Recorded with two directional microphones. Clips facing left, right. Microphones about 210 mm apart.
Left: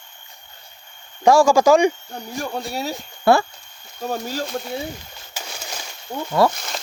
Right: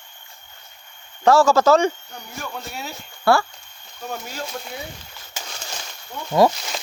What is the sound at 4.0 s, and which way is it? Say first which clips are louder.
Speech: left 6 dB; 35° left (ahead or behind).